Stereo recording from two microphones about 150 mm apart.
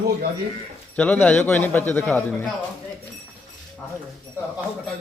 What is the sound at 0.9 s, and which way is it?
A man's voice, 10° left (ahead or behind).